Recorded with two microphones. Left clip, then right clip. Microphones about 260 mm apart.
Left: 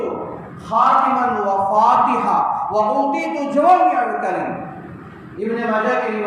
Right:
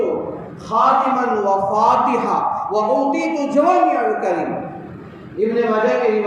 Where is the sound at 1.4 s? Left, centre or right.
Left.